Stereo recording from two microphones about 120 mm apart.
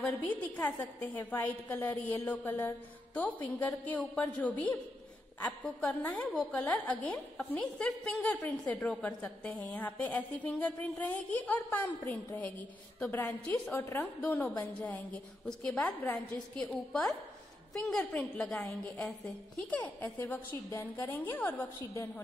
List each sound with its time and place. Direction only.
0.0 s a woman's voice: 10° left (ahead or behind)
14.6 s a woman's voice: 5° left (ahead or behind)